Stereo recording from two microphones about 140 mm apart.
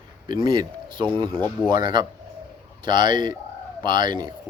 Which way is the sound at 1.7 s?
35° right (ahead or behind).